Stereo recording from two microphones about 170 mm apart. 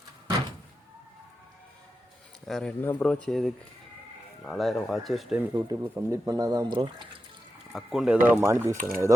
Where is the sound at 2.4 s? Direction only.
5° left (ahead or behind).